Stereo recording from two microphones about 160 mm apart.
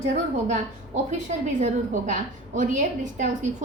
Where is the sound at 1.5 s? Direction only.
50° right (ahead or behind).